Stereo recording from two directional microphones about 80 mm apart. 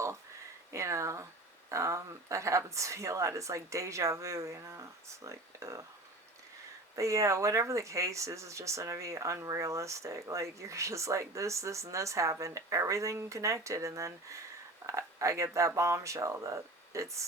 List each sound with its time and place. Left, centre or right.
0.7 s speech: right
6.9 s speech: right